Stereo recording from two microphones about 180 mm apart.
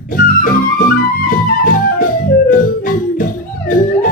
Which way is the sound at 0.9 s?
50° left (ahead or behind).